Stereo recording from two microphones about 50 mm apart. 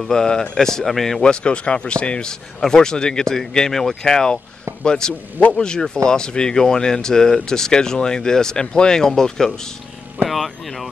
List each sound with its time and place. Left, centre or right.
0.0 s speech: centre
1.2 s speech: centre
10.2 s speech: centre